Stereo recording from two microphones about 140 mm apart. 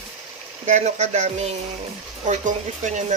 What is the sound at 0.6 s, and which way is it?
Speech, 55° right (ahead or behind).